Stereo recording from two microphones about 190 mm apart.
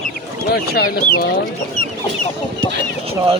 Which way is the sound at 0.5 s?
55° left (ahead or behind).